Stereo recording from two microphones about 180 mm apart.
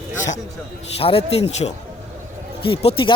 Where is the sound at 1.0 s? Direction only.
30° left (ahead or behind).